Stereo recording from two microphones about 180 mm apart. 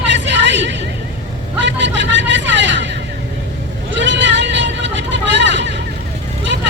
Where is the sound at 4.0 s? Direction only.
90° right.